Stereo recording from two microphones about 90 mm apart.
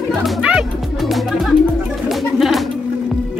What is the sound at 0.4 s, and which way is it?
Music, 10° right (ahead or behind).